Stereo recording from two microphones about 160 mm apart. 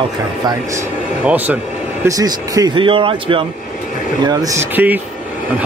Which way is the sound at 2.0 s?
20° right (ahead or behind).